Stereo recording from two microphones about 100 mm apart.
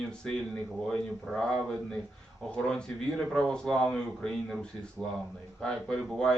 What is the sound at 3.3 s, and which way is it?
Speech, 10° left (ahead or behind).